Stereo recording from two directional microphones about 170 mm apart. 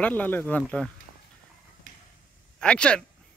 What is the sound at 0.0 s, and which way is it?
Speech, 10° left (ahead or behind).